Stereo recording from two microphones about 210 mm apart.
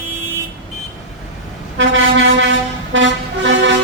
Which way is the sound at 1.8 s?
65° right (ahead or behind).